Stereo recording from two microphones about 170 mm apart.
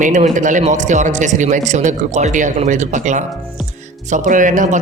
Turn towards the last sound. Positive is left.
turn(degrees=-50)  # may be behind; listen again after turning